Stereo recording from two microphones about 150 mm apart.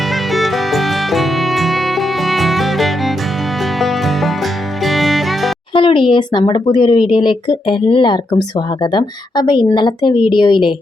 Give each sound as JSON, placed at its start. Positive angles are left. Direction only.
{"t": 0.1, "sound": "music", "side_deg": 0}
{"t": 5.7, "sound": "speech", "side_deg": 35}